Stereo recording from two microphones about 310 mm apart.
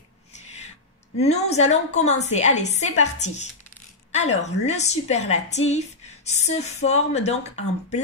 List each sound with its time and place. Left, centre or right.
1.2 s speech: left